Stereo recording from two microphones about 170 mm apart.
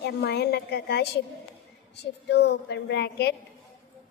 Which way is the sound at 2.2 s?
90° left.